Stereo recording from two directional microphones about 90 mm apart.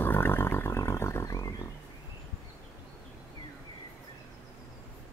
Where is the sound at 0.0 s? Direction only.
25° left (ahead or behind).